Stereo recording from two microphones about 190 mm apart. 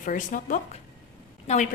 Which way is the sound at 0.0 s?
45° left (ahead or behind).